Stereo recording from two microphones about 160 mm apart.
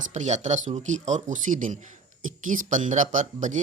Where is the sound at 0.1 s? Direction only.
45° right (ahead or behind).